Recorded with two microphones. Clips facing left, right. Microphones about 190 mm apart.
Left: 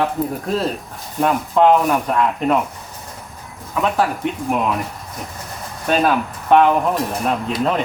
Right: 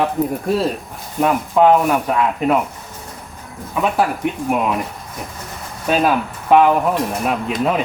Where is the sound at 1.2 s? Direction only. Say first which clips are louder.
Right 1 dB; 5° right (ahead or behind).